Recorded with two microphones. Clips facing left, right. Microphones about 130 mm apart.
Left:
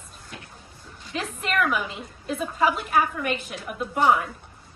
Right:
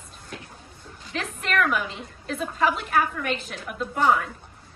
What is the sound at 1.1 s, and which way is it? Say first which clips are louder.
A woman's voice: even; centre (ahead or behind).